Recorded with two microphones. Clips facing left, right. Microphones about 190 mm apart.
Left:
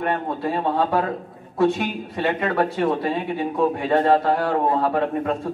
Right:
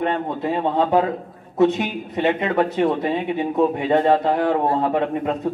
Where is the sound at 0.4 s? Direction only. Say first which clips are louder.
Right 3 dB; 20° right (ahead or behind).